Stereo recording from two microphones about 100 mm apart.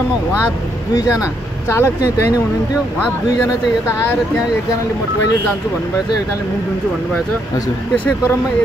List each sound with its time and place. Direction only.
0.9 s speech: 35° left (ahead or behind)